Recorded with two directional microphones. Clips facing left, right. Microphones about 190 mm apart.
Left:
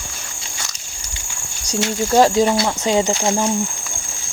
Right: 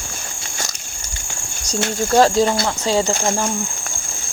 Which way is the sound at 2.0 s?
15° left (ahead or behind).